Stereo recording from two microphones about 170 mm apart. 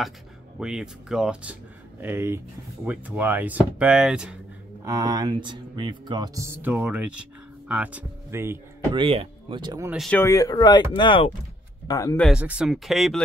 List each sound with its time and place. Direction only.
0.6 s speech: 5° right (ahead or behind)
4.8 s speech: 20° right (ahead or behind)
8.9 s speech: 30° right (ahead or behind)
9.8 s speech: centre (ahead or behind)
10.1 s speech: 20° left (ahead or behind)
11.9 s speech: 20° left (ahead or behind)
12.2 s speech: 5° right (ahead or behind)